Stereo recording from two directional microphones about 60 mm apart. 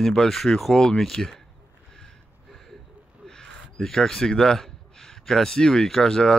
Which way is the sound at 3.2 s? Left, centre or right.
Centre.